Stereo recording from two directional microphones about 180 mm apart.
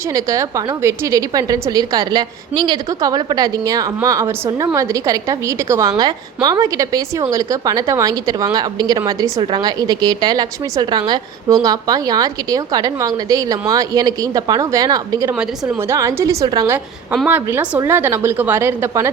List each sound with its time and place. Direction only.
0.1 s a woman's voice: 15° right (ahead or behind)